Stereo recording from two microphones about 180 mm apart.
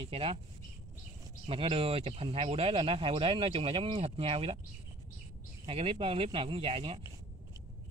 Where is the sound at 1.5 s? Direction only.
30° right (ahead or behind).